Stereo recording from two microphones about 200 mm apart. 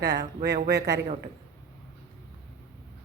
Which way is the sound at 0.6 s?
55° right (ahead or behind).